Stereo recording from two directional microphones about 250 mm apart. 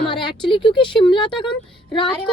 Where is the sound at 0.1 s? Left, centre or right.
Centre.